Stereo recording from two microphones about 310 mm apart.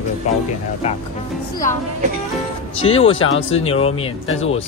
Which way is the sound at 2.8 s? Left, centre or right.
Centre.